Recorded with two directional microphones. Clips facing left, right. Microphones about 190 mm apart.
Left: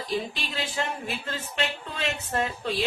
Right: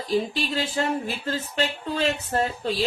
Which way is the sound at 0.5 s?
40° right (ahead or behind).